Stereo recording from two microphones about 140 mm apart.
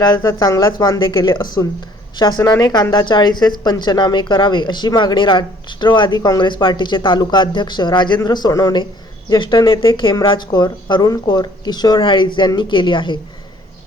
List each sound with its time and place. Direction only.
0.0 s speech: 25° left (ahead or behind)